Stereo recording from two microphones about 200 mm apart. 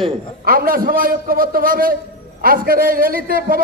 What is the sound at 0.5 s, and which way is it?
A man's voice, 45° right (ahead or behind).